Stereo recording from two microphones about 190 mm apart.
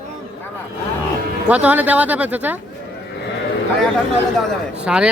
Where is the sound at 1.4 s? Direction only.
10° right (ahead or behind).